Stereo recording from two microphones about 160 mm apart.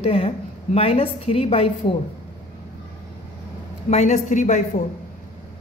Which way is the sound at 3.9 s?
50° left (ahead or behind).